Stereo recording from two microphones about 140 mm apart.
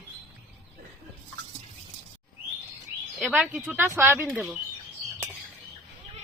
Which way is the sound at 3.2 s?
10° right (ahead or behind).